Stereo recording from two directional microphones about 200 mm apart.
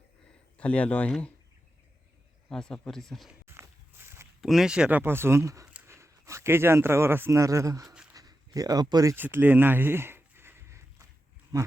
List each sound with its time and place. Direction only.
0.5 s speech: 5° left (ahead or behind)
2.5 s speech: 5° left (ahead or behind)
3.4 s walk: 10° right (ahead or behind)
4.4 s speech: centre (ahead or behind); by 7.9 s 15° right (ahead or behind)
8.1 s a sound: 20° right (ahead or behind)
11.5 s speech: 20° right (ahead or behind)